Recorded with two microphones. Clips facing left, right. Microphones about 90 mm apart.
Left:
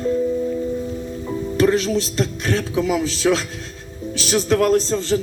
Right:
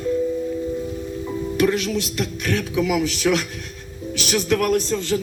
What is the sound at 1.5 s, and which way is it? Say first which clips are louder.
Speech: left 3 dB; 35° left (ahead or behind).